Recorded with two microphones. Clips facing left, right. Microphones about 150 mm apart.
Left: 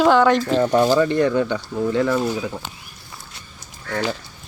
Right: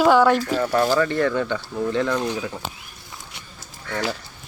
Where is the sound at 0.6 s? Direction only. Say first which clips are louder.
Left 3 dB; 15° left (ahead or behind).